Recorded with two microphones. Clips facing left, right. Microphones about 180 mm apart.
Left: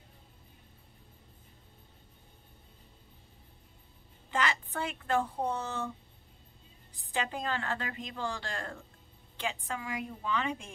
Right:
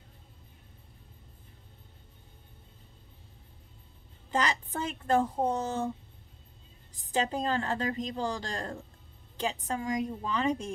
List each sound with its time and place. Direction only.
4.3 s a woman's voice: 35° right (ahead or behind)
7.1 s a woman's voice: 35° right (ahead or behind)